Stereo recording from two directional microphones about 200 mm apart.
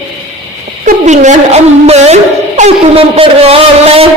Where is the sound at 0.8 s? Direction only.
35° right (ahead or behind).